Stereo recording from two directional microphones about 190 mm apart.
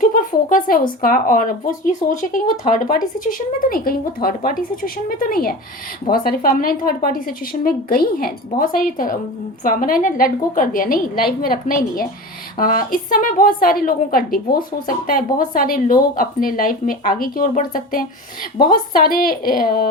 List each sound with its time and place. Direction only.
0.0 s speech: 45° left (ahead or behind)
18.5 s a woman's voice: 25° left (ahead or behind)
18.9 s speech: 50° left (ahead or behind)